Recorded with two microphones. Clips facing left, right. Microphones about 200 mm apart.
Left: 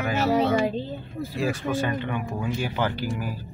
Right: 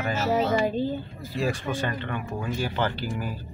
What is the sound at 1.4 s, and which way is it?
Speech, 5° left (ahead or behind).